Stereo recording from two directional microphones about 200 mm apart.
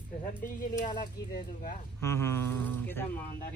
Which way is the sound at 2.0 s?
10° left (ahead or behind).